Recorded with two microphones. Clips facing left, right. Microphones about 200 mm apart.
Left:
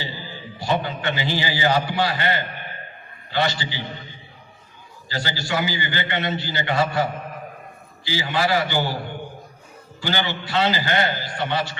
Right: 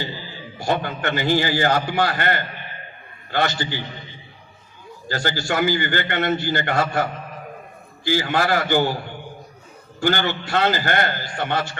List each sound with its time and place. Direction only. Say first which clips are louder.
0.6 s a man's voice: right 1 dB; 50° right (ahead or behind)
5.0 s a man's voice: right 4 dB; 50° right (ahead or behind)
10.0 s a man's voice: right 4 dB; 50° right (ahead or behind)